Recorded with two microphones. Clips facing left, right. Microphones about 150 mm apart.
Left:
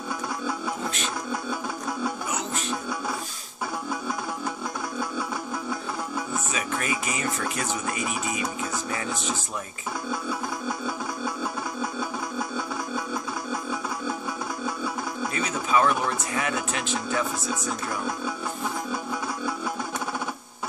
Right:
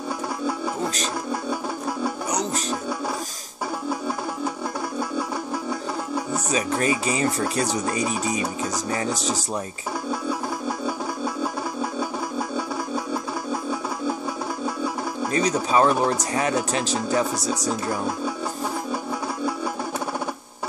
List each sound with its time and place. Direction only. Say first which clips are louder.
2.3 s music: right 4 dB; 40° right (ahead or behind)
6.3 s speech: right 8 dB; 35° right (ahead or behind)
15.3 s speech: right 5 dB; 35° right (ahead or behind)